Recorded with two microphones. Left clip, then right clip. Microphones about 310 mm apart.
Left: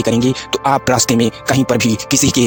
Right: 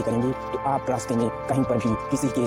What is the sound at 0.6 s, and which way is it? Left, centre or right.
Speech, left.